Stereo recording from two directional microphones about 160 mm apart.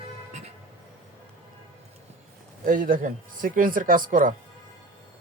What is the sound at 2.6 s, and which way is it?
Speech, 60° right (ahead or behind).